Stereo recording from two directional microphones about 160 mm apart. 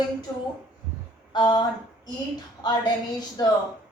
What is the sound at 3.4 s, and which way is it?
Speech, 25° left (ahead or behind).